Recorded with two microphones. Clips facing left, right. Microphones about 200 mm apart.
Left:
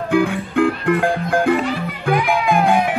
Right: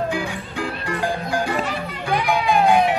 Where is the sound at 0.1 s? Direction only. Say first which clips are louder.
Left 9 dB; 55° left (ahead or behind).